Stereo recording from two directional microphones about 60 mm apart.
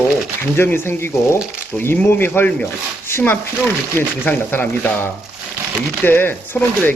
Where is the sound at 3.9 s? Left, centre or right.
Left.